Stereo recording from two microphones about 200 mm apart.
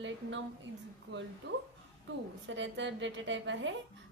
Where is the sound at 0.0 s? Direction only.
70° right (ahead or behind).